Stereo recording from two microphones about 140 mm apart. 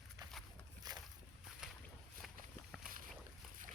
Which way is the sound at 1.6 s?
5° right (ahead or behind).